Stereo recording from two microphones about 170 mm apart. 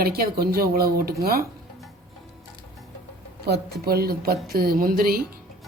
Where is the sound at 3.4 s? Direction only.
70° right (ahead or behind).